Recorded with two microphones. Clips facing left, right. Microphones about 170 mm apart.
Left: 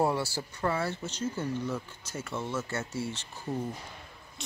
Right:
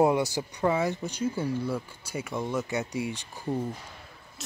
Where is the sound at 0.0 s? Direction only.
15° right (ahead or behind).